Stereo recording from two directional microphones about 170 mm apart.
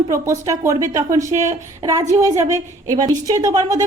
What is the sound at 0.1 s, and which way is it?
A woman's voice, 20° right (ahead or behind).